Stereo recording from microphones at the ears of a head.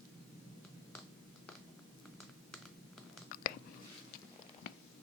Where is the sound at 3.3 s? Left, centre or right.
Left.